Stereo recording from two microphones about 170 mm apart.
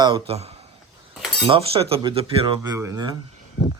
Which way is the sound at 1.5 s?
35° right (ahead or behind).